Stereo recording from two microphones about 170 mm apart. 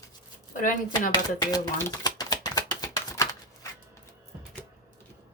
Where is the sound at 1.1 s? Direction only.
20° left (ahead or behind).